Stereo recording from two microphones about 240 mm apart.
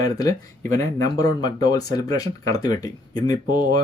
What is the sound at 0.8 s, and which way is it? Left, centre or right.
Speech, centre.